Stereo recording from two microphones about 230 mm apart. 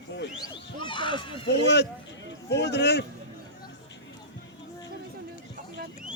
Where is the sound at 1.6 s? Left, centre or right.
Left.